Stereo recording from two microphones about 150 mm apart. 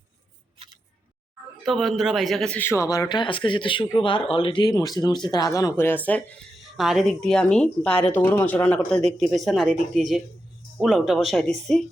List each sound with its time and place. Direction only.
1.6 s a man's voice: centre (ahead or behind)
6.7 s a man's voice: centre (ahead or behind)